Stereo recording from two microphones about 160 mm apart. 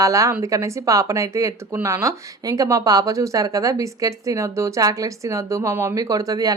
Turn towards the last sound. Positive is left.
turn(degrees=-20)  # may be behind; listen again after turning